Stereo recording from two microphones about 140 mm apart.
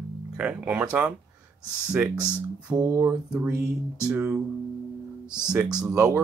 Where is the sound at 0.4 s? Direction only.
10° right (ahead or behind).